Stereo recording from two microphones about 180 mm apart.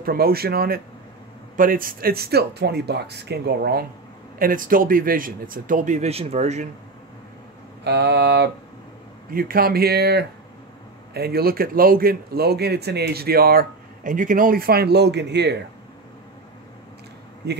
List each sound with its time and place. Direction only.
0.0 s speech: 55° right (ahead or behind)
4.4 s speech: 50° right (ahead or behind)
7.8 s mantra: 70° right (ahead or behind)
9.3 s speech: 55° right (ahead or behind)
17.4 s mantra: 70° right (ahead or behind)